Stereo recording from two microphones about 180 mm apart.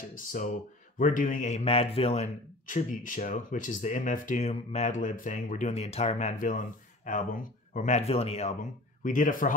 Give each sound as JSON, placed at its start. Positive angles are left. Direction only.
{"t": 0.1, "sound": "a man's voice", "side_deg": 50}